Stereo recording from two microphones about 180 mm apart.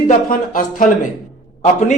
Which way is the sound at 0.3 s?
50° left (ahead or behind).